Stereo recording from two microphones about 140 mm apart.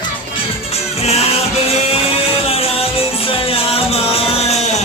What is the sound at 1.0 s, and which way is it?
Music, 45° left (ahead or behind).